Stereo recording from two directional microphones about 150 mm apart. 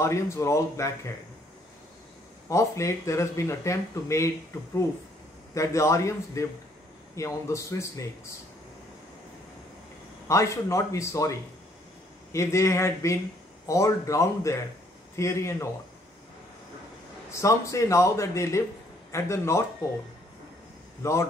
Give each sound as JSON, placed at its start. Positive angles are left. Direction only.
{"t": 0.0, "sound": "speech", "side_deg": 20}
{"t": 2.5, "sound": "speech", "side_deg": 20}
{"t": 5.5, "sound": "speech", "side_deg": 20}
{"t": 10.2, "sound": "speech", "side_deg": 20}
{"t": 17.3, "sound": "speech", "side_deg": 20}
{"t": 21.0, "sound": "speech", "side_deg": 20}